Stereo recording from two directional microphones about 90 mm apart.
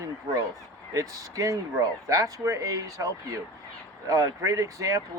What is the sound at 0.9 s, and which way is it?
Speech, 40° right (ahead or behind).